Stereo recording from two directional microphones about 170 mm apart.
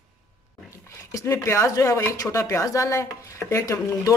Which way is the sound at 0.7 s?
15° left (ahead or behind).